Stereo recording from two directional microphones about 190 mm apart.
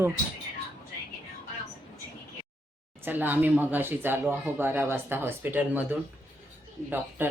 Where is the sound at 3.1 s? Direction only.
10° right (ahead or behind).